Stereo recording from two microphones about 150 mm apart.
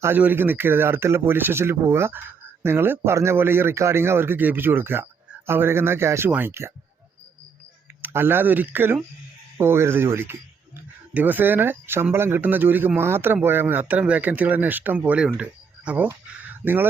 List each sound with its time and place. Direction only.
0.0 s speech: 15° right (ahead or behind)
8.0 s speech: 15° right (ahead or behind)